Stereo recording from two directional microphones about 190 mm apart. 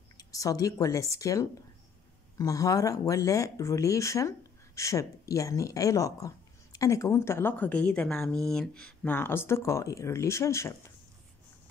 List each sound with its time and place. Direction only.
0.2 s speech: 15° left (ahead or behind)